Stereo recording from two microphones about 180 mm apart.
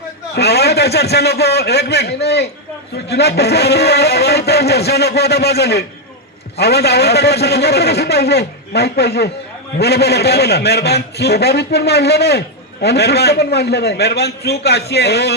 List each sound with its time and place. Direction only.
0.3 s a man's voice: 65° left (ahead or behind)